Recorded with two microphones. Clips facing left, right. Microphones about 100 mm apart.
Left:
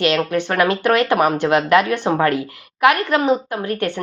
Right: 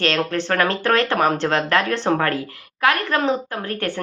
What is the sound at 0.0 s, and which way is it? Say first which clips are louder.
Speech: left 3 dB; 15° left (ahead or behind).